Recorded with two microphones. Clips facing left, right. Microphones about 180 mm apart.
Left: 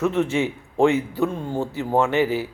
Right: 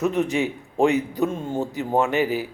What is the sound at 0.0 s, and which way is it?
A man's voice, 15° right (ahead or behind).